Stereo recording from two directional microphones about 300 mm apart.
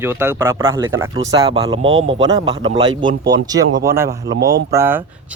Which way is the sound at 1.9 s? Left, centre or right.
Right.